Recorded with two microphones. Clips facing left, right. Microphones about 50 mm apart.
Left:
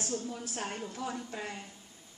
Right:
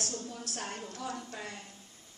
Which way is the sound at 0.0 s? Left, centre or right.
Centre.